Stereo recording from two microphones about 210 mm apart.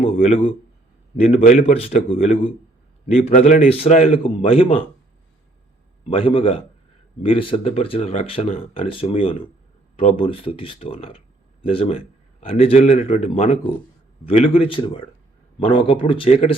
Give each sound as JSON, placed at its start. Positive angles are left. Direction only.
{"t": 0.0, "sound": "a sound", "side_deg": 25}
{"t": 1.1, "sound": "speech", "side_deg": 30}
{"t": 6.1, "sound": "speech", "side_deg": 25}